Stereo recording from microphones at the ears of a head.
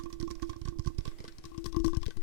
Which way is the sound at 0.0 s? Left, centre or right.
Right.